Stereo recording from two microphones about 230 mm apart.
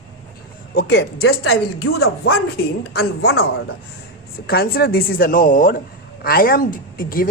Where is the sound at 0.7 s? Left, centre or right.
Left.